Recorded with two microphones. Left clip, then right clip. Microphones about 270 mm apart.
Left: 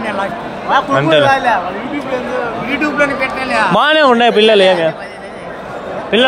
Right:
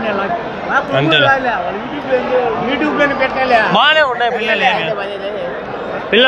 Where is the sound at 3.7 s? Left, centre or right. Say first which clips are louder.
Left 2 dB; left.